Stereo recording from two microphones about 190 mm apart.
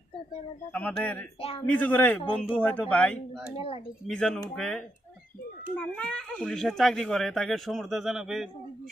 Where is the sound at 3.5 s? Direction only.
30° left (ahead or behind).